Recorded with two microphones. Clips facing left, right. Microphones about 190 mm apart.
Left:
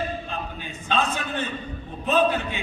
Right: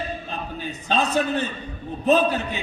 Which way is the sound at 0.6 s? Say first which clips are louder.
Right 2 dB; 40° right (ahead or behind).